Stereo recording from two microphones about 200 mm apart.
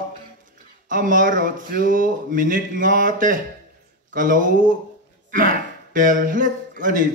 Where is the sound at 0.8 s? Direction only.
40° right (ahead or behind).